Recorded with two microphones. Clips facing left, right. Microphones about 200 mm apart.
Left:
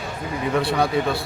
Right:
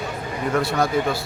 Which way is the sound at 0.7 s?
Centre (ahead or behind).